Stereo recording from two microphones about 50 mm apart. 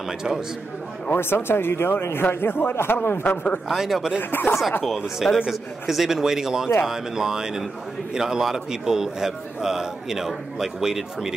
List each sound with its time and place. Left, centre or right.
1.1 s speech: left
3.0 s speech: left
3.6 s a man's voice: centre
4.2 s speech: left
4.8 s a man's voice: centre